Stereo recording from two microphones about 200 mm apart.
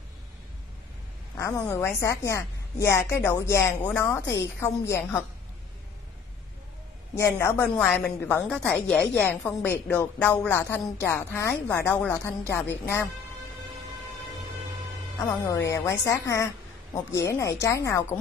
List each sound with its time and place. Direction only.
1.3 s a woman's voice: 15° left (ahead or behind)
7.2 s a woman's voice: 15° left (ahead or behind)
15.1 s a woman's voice: 15° left (ahead or behind)